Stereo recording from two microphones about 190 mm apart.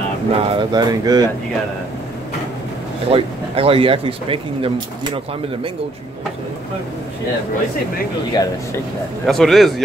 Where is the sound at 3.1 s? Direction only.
30° right (ahead or behind).